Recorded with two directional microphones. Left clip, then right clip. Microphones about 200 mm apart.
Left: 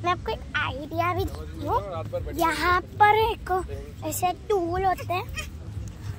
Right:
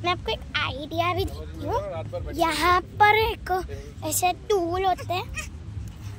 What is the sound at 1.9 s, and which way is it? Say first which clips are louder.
Speech: left 1 dB; 25° right (ahead or behind).